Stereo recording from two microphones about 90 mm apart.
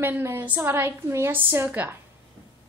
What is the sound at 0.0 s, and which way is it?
A woman's voice, 25° right (ahead or behind).